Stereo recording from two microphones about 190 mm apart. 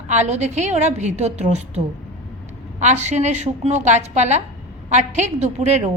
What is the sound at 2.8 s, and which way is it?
A woman's voice, 35° right (ahead or behind).